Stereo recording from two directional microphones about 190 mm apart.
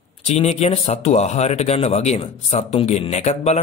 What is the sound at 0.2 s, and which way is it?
A man's voice, 35° left (ahead or behind).